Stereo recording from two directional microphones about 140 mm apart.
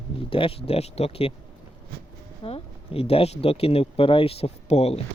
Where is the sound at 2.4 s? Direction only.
45° left (ahead or behind).